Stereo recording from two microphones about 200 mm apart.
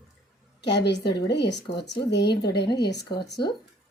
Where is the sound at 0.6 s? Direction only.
60° left (ahead or behind).